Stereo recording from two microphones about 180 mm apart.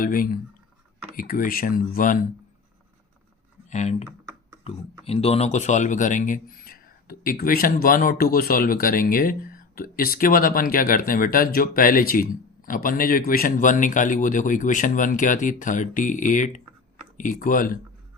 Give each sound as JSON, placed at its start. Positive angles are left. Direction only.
{"t": 0.0, "sound": "speech", "side_deg": 50}
{"t": 3.7, "sound": "speech", "side_deg": 40}